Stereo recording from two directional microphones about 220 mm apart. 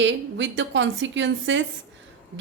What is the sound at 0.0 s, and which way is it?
A woman's voice, 55° right (ahead or behind).